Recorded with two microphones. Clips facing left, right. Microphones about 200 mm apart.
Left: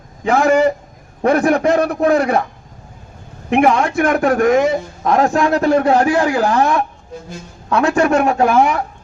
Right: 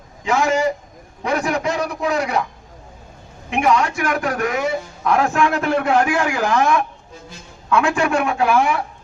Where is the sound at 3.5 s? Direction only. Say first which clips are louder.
Left 4 dB; 55° left (ahead or behind).